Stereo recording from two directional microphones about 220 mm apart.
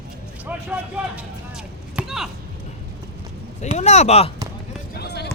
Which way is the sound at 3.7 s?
30° left (ahead or behind).